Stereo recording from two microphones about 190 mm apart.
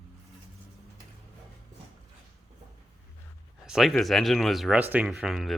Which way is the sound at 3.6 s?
Centre (ahead or behind).